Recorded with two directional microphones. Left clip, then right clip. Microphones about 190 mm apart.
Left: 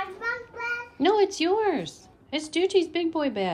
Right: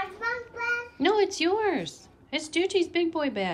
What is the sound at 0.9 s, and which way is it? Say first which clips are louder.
A woman's voice: left 3 dB; 15° left (ahead or behind).